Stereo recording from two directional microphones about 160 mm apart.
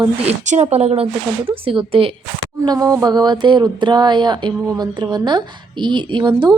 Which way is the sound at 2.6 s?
20° right (ahead or behind).